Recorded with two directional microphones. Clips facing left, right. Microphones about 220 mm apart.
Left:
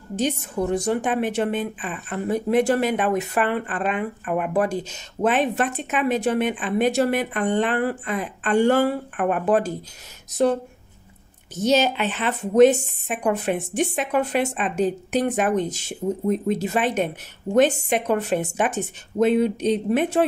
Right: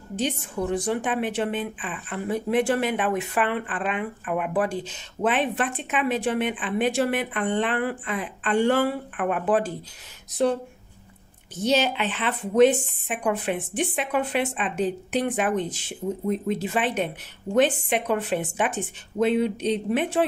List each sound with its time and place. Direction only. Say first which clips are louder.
0.1 s a woman's voice: left 3 dB; 45° left (ahead or behind)
11.5 s a woman's voice: left 3 dB; 45° left (ahead or behind)